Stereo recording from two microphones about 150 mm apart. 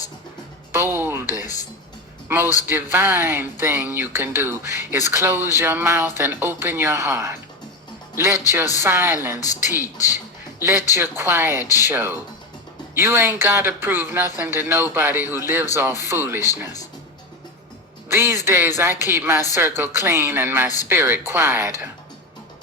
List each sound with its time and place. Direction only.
0.7 s music: 15° right (ahead or behind)
2.3 s speech: 15° right (ahead or behind)
10.6 s speech: 15° right (ahead or behind)
18.1 s speech: 15° right (ahead or behind)